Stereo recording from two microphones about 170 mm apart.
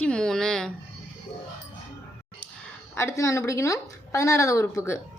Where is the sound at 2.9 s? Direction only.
15° left (ahead or behind).